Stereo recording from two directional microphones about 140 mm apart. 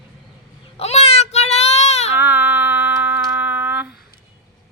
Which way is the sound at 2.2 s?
10° right (ahead or behind).